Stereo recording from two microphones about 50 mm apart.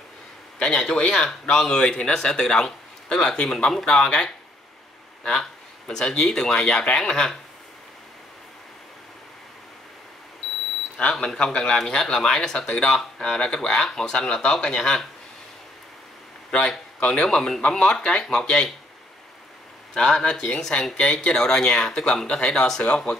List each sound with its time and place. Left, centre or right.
0.6 s speech: centre
11.0 s speech: centre
16.5 s speech: left
19.9 s speech: centre
20.9 s speech: left